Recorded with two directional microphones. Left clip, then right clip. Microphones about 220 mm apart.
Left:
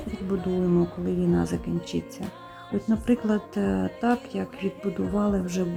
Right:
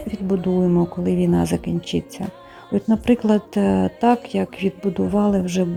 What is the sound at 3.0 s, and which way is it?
A woman's voice, 20° right (ahead or behind).